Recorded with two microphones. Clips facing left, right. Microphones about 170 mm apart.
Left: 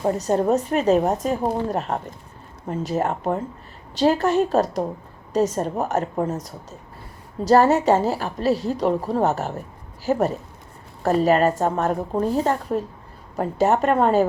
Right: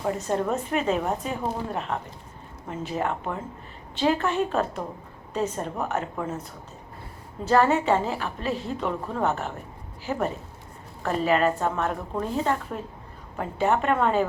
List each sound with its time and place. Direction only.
0.0 s a woman's voice: 40° left (ahead or behind)